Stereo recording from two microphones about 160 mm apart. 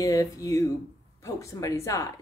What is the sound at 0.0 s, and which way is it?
A woman's voice, 20° left (ahead or behind).